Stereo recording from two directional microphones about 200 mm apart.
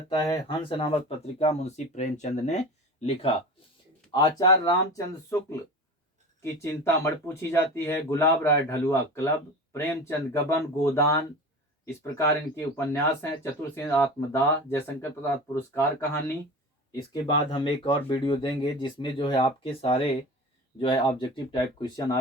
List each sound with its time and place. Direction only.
0.1 s speech: 15° left (ahead or behind)
4.1 s speech: 20° left (ahead or behind)